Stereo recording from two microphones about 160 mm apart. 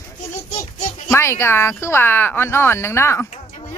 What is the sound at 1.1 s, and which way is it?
A woman's voice, 15° left (ahead or behind).